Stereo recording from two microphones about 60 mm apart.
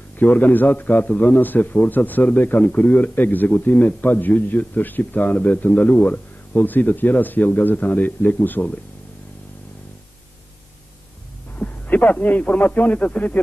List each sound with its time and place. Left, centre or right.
0.2 s a man's voice: left
11.5 s a man's voice: left